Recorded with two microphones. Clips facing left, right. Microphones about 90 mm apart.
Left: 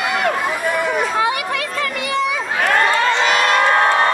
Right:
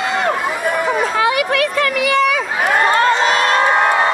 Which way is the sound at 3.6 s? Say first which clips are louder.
Right 1 dB; 15° right (ahead or behind).